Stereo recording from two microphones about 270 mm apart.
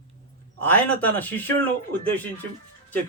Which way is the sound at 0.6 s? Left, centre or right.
Centre.